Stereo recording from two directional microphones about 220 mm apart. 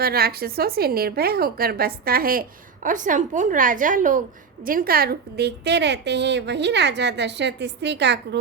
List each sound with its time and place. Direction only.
0.0 s speech: 45° right (ahead or behind)